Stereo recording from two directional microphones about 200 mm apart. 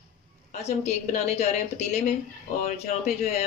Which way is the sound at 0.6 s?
35° left (ahead or behind).